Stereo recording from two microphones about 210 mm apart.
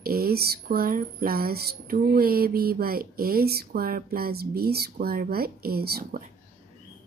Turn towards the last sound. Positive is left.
turn(degrees=-50)  # may be behind; listen again after turning